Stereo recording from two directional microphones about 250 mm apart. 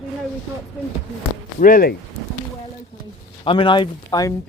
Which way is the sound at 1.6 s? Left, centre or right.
Left.